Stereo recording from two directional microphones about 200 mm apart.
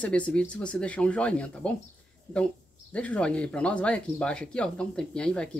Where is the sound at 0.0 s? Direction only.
5° left (ahead or behind).